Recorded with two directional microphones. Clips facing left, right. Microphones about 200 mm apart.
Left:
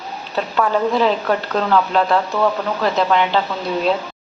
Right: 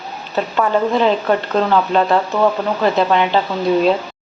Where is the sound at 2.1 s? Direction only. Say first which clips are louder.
Right 2 dB; 15° right (ahead or behind).